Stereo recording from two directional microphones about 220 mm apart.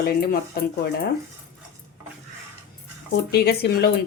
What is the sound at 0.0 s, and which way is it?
A woman's voice, 40° left (ahead or behind).